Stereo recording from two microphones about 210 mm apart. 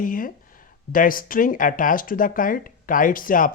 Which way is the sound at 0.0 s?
40° left (ahead or behind).